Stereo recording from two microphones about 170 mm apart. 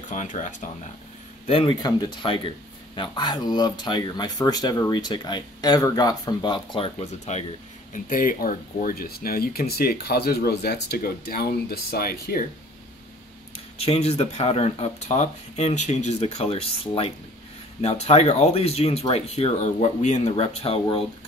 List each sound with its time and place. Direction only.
0.1 s speech: 45° left (ahead or behind)
1.5 s speech: 30° left (ahead or behind)
7.9 s speech: 55° left (ahead or behind)
13.7 s speech: 35° left (ahead or behind)
17.8 s speech: 40° left (ahead or behind)